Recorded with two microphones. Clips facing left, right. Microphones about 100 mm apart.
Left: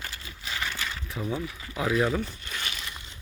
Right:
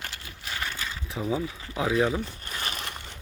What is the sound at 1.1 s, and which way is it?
Speech, 30° right (ahead or behind).